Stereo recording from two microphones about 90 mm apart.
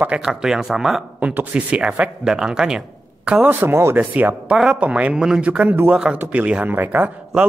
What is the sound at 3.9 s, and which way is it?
Speech, 15° right (ahead or behind).